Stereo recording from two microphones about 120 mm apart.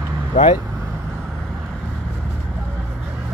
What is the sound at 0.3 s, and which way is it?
Speech, 90° left.